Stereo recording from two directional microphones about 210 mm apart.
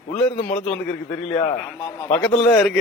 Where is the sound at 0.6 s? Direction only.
5° left (ahead or behind).